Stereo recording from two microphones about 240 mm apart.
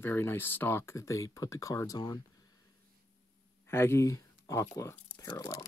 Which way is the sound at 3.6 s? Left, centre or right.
Centre.